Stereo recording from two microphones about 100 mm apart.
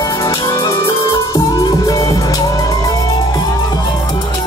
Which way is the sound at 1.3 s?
35° left (ahead or behind).